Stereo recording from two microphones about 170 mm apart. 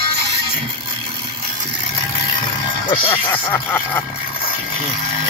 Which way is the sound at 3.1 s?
15° left (ahead or behind).